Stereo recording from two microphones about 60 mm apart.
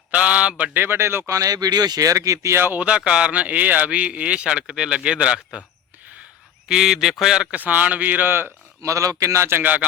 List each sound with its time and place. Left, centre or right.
0.1 s speech: right
0.8 s speech: right
2.7 s speech: centre
6.7 s speech: centre
7.5 s speech: right
8.8 s speech: right
9.5 s speech: right